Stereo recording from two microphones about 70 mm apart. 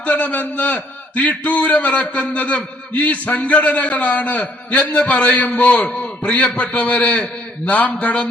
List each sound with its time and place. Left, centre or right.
0.0 s a man's voice: centre